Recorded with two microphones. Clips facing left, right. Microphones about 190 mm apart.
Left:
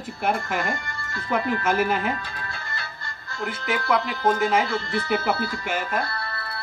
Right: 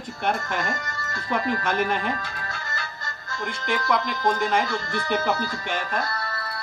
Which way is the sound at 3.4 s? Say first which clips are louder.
Left 1 dB; 5° left (ahead or behind).